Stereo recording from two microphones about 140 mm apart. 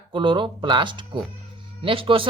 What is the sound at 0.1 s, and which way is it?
Speech, 35° right (ahead or behind).